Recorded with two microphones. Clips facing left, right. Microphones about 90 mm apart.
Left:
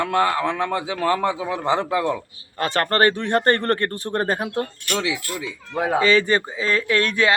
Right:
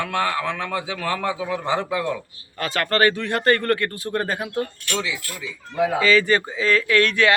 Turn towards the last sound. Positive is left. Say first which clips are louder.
# right 1 dB
turn(degrees=25)  # may be behind; listen again after turning